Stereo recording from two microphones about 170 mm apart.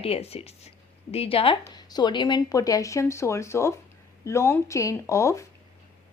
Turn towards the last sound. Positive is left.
turn(degrees=15)  # may be behind; listen again after turning